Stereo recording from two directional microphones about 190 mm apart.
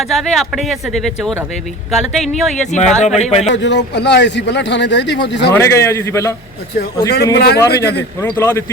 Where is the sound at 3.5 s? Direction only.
65° left (ahead or behind).